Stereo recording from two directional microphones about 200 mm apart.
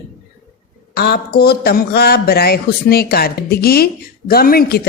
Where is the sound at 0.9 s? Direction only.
50° left (ahead or behind).